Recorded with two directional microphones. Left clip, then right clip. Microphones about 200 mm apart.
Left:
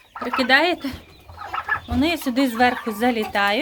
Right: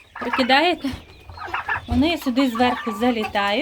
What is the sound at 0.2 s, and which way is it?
Speech, 10° right (ahead or behind).